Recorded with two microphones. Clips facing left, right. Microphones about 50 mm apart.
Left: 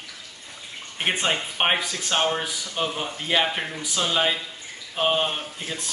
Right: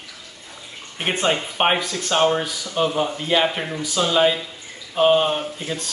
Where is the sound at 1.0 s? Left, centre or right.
Centre.